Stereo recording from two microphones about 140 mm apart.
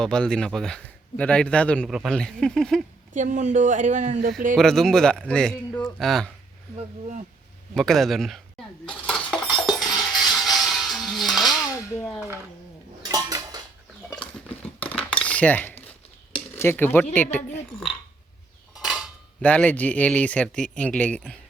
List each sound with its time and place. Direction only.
0.0 s speech: 5° left (ahead or behind)
1.9 s a man's voice: 5° right (ahead or behind)
3.1 s speech: 65° right (ahead or behind)
4.5 s a man's voice: 5° left (ahead or behind)
6.7 s speech: 60° right (ahead or behind)
7.7 s a man's voice: centre (ahead or behind)
8.9 s cutlery: 5° left (ahead or behind)
9.6 s music: centre (ahead or behind)
11.9 s dishes: 15° left (ahead or behind)
13.1 s dishes: 25° right (ahead or behind)
14.2 s cutlery: 10° left (ahead or behind)
16.6 s speech: 15° left (ahead or behind)
19.4 s speech: 10° left (ahead or behind)